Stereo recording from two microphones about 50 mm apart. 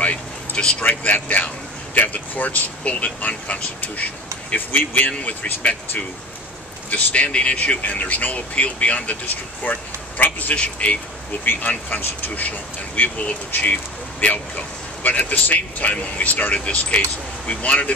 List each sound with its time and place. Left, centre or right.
0.0 s a sound: left
0.8 s speech: left
6.9 s speech: left
10.5 s speech: left
16.5 s speech: left